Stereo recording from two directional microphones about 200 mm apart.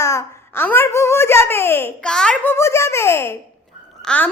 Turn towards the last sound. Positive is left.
turn(degrees=5)  # may be behind; listen again after turning